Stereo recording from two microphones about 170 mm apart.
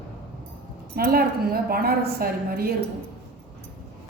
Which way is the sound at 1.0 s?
65° right (ahead or behind).